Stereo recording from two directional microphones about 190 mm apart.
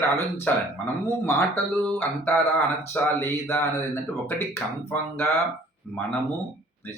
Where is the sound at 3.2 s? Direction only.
15° left (ahead or behind).